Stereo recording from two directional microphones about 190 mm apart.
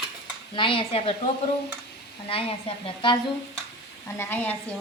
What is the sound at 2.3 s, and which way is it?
Speech, 30° left (ahead or behind).